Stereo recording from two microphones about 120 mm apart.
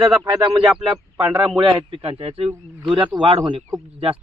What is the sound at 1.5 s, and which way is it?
A man's voice, 45° right (ahead or behind).